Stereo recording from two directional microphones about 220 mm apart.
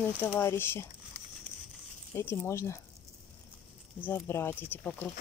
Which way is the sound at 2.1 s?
10° left (ahead or behind).